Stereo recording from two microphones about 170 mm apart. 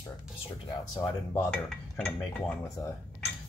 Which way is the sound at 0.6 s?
20° left (ahead or behind).